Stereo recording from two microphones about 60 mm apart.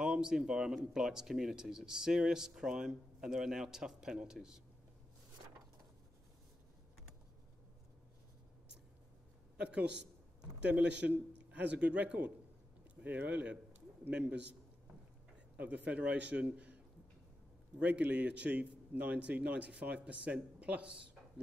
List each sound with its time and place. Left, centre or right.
0.0 s speech: centre
9.6 s a man's voice: right
15.5 s a man's voice: right